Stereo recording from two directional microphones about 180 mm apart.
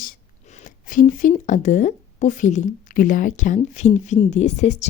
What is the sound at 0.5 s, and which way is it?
A woman's voice, 45° left (ahead or behind).